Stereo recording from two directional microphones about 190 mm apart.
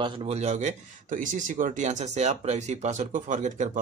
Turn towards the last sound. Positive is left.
turn(degrees=-40)  # may be behind; listen again after turning